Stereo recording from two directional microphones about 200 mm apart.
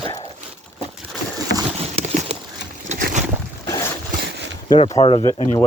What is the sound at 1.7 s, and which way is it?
Clip-clop, 30° right (ahead or behind).